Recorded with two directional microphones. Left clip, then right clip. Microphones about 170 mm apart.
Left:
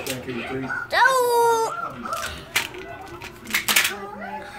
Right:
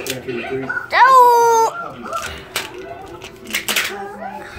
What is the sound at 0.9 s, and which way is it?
Speech, centre (ahead or behind).